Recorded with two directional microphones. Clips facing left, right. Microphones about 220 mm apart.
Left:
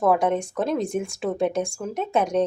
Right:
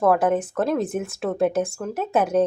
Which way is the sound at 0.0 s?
Centre (ahead or behind).